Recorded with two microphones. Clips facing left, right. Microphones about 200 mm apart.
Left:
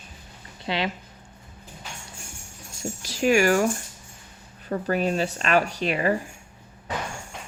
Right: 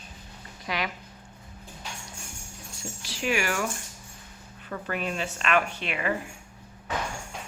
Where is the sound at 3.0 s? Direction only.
45° left (ahead or behind).